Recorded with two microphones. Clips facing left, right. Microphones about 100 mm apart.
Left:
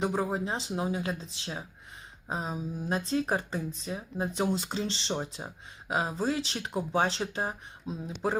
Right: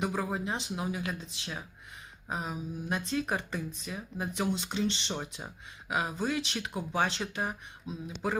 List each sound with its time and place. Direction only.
0.0 s speech: 30° left (ahead or behind)